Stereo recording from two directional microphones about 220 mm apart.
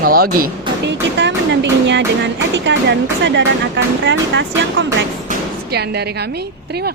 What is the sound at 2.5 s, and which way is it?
Speech, 55° right (ahead or behind).